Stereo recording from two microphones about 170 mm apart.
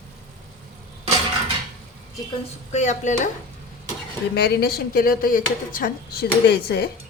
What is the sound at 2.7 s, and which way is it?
Speech, 45° left (ahead or behind).